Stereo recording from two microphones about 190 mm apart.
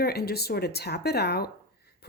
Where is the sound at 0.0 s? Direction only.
55° left (ahead or behind).